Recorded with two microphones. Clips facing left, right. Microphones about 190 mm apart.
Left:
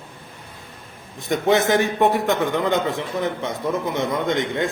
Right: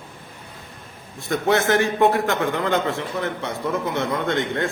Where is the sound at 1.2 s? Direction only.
20° left (ahead or behind).